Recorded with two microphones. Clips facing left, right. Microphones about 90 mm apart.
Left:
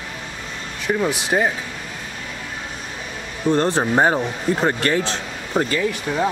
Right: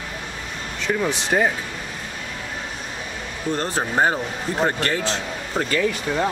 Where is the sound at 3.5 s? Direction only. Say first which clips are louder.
Left 4 dB; 20° left (ahead or behind).